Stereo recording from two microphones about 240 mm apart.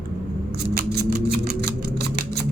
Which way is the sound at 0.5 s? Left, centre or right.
Right.